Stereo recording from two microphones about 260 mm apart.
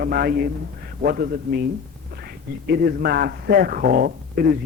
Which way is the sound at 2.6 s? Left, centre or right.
Right.